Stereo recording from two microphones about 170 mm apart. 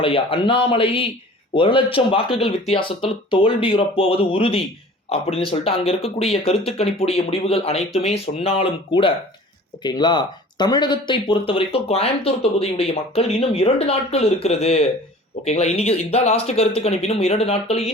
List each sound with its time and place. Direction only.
0.0 s speech: 30° left (ahead or behind)